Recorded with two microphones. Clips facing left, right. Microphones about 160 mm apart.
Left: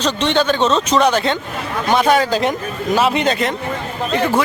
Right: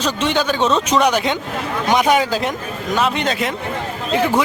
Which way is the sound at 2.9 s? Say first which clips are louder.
Left 3 dB; centre (ahead or behind).